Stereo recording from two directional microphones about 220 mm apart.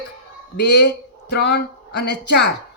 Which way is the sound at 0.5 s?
50° left (ahead or behind).